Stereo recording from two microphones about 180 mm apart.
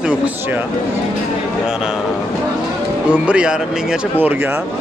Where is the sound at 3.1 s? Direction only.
5° right (ahead or behind).